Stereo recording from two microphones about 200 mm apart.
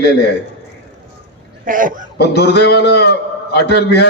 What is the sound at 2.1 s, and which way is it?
A man's voice, 55° left (ahead or behind).